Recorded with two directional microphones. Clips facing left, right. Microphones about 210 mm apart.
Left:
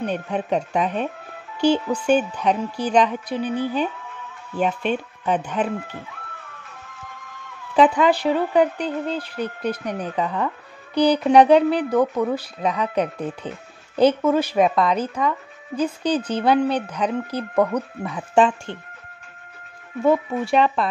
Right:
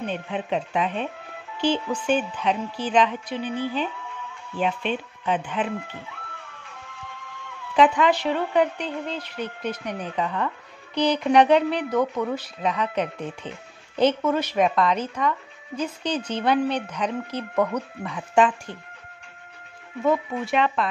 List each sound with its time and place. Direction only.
0.0 s a woman's voice: 45° left (ahead or behind)
7.7 s speech: 35° left (ahead or behind)
20.0 s speech: 35° left (ahead or behind)